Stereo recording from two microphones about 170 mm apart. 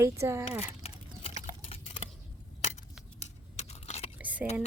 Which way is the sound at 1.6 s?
35° left (ahead or behind).